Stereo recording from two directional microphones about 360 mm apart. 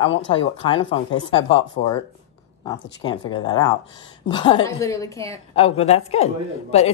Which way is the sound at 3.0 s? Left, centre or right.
Centre.